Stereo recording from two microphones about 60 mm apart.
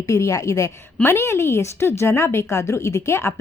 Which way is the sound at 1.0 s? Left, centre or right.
Left.